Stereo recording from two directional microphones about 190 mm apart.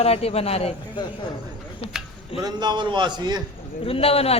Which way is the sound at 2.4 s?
25° right (ahead or behind).